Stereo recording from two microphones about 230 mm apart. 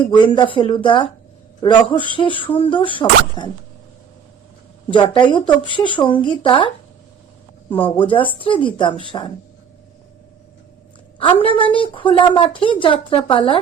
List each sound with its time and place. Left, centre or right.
0.0 s a woman's voice: left
4.9 s a woman's voice: centre
11.2 s a woman's voice: left